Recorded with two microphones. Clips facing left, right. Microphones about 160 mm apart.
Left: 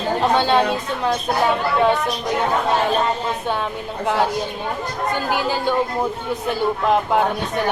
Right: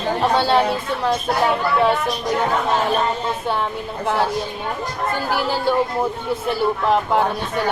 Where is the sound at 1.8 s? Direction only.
20° left (ahead or behind).